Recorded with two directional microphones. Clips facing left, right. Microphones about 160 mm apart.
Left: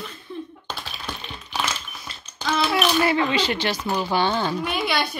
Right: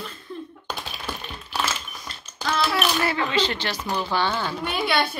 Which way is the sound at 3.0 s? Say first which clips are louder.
Left 3 dB; 15° left (ahead or behind).